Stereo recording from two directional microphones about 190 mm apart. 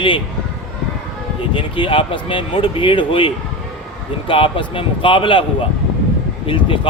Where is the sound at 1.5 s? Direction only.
25° left (ahead or behind).